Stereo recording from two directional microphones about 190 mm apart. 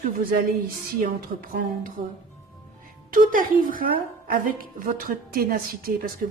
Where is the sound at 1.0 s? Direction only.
45° right (ahead or behind).